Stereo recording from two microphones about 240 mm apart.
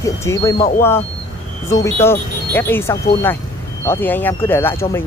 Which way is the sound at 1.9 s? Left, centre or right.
Centre.